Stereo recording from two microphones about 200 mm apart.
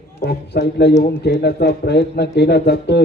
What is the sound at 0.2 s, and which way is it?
Speech, 55° left (ahead or behind).